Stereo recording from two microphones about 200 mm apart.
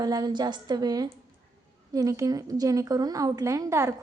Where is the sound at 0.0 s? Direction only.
20° right (ahead or behind).